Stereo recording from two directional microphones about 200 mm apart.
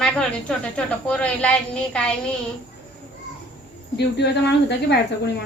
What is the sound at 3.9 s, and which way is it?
Speech, 55° left (ahead or behind).